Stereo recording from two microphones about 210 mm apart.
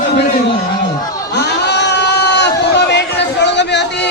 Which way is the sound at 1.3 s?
55° left (ahead or behind).